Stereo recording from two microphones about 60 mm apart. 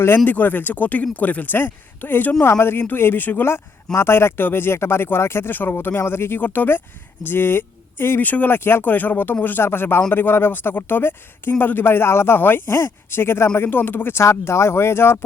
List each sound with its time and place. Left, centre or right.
0.3 s speech: left
2.5 s speech: left
3.9 s speech: left
14.2 s speech: left